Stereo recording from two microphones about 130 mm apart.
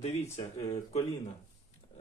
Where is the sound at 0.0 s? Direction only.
60° left (ahead or behind).